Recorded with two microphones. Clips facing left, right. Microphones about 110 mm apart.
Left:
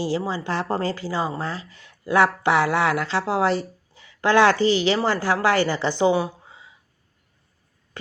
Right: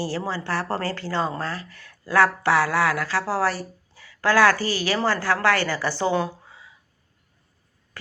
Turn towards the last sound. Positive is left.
turn(degrees=15)  # may be behind; listen again after turning